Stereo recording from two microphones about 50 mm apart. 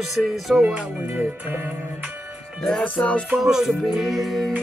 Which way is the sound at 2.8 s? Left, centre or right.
Left.